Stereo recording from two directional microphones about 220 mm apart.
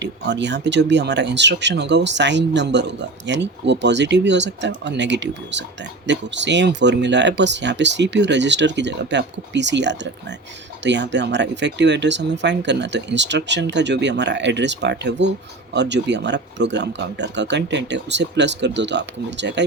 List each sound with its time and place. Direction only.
0.0 s speech: 55° right (ahead or behind)